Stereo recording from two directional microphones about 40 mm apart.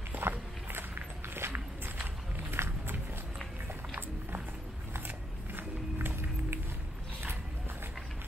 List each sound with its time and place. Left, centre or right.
0.1 s walk: right
0.7 s walk: right
2.5 s a sound: right
4.9 s music: right